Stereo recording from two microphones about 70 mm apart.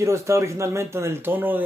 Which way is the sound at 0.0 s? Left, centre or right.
Right.